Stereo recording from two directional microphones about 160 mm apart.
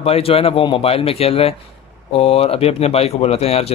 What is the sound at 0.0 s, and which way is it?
Speech, 40° left (ahead or behind).